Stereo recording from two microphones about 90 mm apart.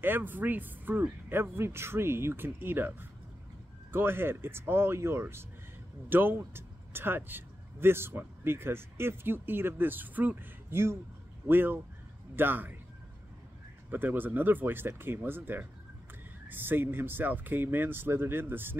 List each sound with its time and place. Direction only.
0.0 s a man's voice: 20° right (ahead or behind)
13.8 s speech: 20° right (ahead or behind)